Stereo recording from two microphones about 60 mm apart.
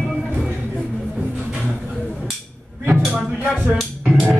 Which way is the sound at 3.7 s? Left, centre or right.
Centre.